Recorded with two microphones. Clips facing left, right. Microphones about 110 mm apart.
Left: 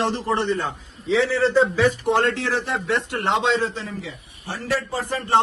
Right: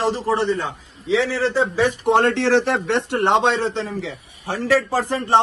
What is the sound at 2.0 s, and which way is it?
Speech, 60° right (ahead or behind).